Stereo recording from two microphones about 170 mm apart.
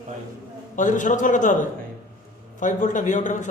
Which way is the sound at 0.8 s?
50° left (ahead or behind).